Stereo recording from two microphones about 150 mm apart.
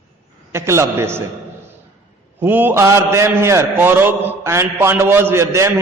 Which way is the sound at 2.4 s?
15° right (ahead or behind).